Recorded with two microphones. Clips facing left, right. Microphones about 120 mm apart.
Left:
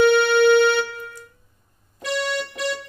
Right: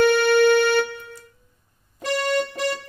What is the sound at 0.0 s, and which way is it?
Music, 55° right (ahead or behind).